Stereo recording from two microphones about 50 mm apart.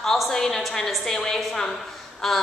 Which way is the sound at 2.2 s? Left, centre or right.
Centre.